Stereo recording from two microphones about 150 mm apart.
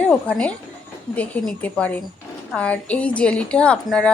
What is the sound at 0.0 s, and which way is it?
A woman's voice, 10° left (ahead or behind).